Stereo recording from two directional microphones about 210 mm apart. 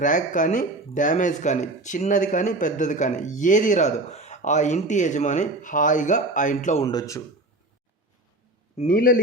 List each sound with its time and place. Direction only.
0.0 s speech: 40° left (ahead or behind)
6.8 s a man's voice: 15° left (ahead or behind)
8.8 s a man's voice: 40° left (ahead or behind)